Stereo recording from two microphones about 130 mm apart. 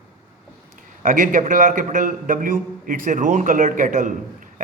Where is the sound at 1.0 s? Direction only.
90° right.